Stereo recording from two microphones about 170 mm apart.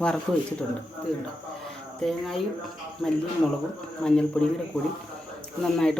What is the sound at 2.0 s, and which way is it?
Speech, centre (ahead or behind).